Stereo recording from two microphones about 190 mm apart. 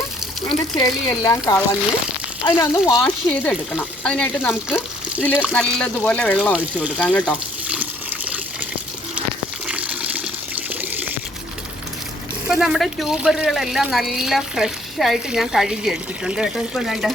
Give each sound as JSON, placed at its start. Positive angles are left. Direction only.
{"t": 0.8, "sound": "speech", "side_deg": 20}
{"t": 3.2, "sound": "speech", "side_deg": 5}
{"t": 5.3, "sound": "speech", "side_deg": -5}
{"t": 5.5, "sound": "speech", "side_deg": 5}
{"t": 6.7, "sound": "speech", "side_deg": -5}
{"t": 7.1, "sound": "speech", "side_deg": 5}
{"t": 8.3, "sound": "water", "side_deg": -5}
{"t": 12.5, "sound": "speech", "side_deg": -5}